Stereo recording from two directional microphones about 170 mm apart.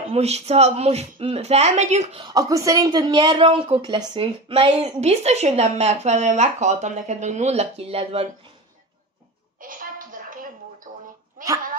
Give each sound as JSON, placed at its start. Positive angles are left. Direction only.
{"t": 0.1, "sound": "a woman's voice", "side_deg": -40}
{"t": 2.2, "sound": "a woman's voice", "side_deg": -20}
{"t": 9.6, "sound": "a sound", "side_deg": -55}
{"t": 11.4, "sound": "dog", "side_deg": -50}